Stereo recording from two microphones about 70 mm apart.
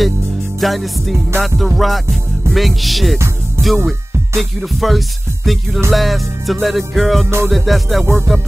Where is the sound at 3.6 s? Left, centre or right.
Right.